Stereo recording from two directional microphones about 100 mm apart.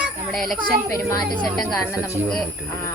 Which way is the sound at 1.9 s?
30° left (ahead or behind).